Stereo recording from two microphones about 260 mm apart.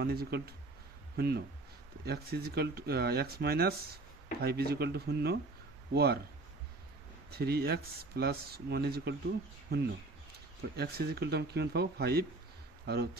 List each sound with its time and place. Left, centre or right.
0.0 s speech: right
7.2 s speech: right